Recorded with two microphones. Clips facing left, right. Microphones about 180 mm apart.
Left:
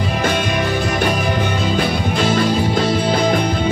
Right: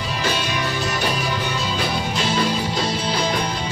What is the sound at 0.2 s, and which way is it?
Music, 55° left (ahead or behind).